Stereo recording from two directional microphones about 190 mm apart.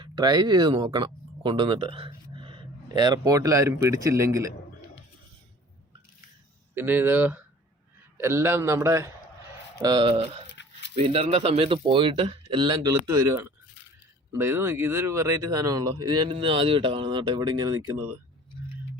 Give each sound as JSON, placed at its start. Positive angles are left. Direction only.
{"t": 0.0, "sound": "speech", "side_deg": -20}
{"t": 6.7, "sound": "a man's voice", "side_deg": -10}
{"t": 10.5, "sound": "a sound", "side_deg": 70}
{"t": 10.9, "sound": "speech", "side_deg": -35}